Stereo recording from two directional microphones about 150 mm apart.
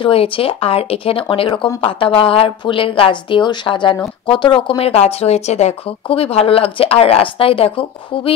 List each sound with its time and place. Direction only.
0.0 s speech: 40° left (ahead or behind)